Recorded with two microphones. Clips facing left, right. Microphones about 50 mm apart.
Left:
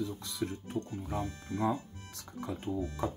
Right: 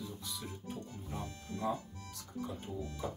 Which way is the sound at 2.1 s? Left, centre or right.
Left.